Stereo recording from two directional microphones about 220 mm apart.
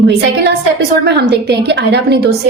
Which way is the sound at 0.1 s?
50° right (ahead or behind).